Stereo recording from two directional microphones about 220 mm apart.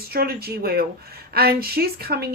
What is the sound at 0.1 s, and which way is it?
Speech, 45° right (ahead or behind).